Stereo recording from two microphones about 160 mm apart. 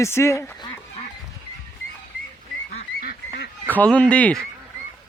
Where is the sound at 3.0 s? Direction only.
85° left.